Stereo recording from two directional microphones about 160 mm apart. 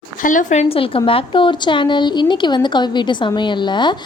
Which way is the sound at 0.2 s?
55° left (ahead or behind).